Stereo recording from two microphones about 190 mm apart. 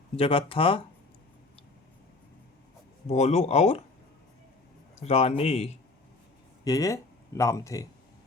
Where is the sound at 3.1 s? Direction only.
35° left (ahead or behind).